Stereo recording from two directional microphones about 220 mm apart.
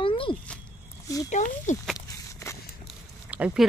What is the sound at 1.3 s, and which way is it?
Speech, 35° left (ahead or behind).